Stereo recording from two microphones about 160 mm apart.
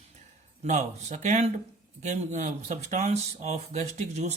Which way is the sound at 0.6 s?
45° right (ahead or behind).